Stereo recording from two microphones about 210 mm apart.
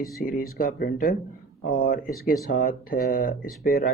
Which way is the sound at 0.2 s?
45° left (ahead or behind).